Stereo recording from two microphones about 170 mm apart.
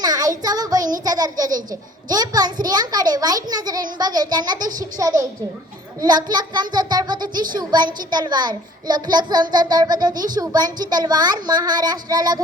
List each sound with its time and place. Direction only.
0.0 s child singing: 20° right (ahead or behind)
1.0 s a child's voice: 20° right (ahead or behind)